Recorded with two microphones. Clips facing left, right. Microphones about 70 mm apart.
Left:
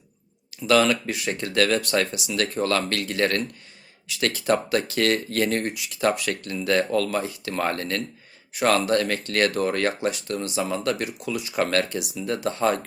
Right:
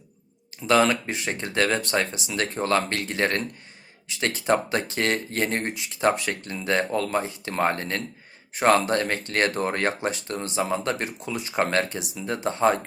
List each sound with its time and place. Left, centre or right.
0.6 s speech: right